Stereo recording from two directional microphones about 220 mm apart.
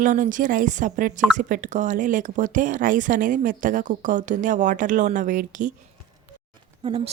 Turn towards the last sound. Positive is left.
turn(degrees=-25)  # may be behind; listen again after turning